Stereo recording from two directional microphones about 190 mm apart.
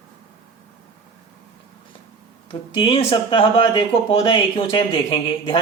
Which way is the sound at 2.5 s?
25° left (ahead or behind).